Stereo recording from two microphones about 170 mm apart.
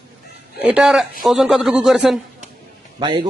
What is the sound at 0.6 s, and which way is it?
Speech, 5° right (ahead or behind).